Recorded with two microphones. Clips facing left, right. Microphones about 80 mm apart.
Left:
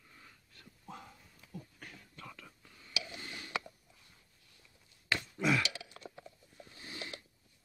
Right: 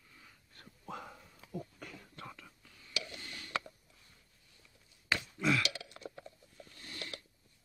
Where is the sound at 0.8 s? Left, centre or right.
Right.